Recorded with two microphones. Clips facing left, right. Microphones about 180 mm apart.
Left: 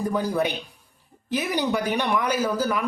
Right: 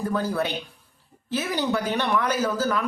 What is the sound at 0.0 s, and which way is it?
Speech, 15° left (ahead or behind).